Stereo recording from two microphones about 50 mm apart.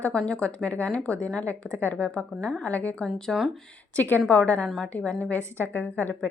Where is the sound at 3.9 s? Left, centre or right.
Left.